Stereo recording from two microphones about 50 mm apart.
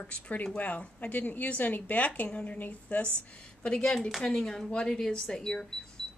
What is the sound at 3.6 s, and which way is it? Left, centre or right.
A woman's voice, centre.